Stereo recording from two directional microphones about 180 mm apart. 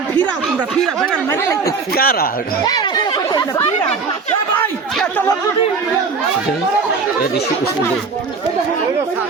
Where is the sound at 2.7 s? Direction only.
20° left (ahead or behind).